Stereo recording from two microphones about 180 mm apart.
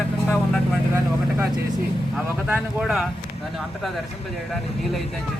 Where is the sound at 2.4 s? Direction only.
5° right (ahead or behind).